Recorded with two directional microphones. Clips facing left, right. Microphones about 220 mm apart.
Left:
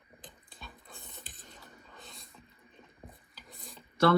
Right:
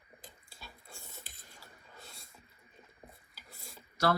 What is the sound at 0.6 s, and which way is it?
Dog, centre (ahead or behind).